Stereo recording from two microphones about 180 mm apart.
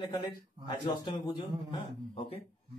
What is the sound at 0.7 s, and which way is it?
A man's voice, 25° left (ahead or behind).